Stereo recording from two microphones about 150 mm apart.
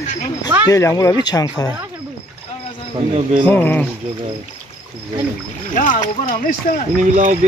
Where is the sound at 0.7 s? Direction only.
20° left (ahead or behind).